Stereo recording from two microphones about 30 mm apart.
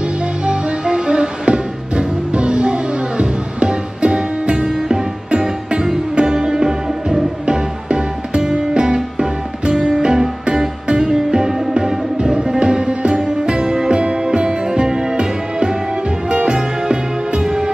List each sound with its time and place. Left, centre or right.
0.5 s music: right
16.3 s music: right